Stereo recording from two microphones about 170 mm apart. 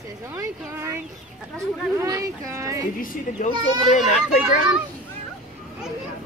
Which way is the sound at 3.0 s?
55° left (ahead or behind).